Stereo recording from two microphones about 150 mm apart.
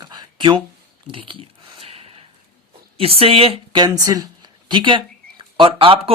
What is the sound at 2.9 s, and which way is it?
Speech, 40° right (ahead or behind).